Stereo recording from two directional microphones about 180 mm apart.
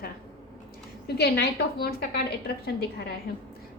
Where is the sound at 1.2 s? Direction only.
60° left (ahead or behind).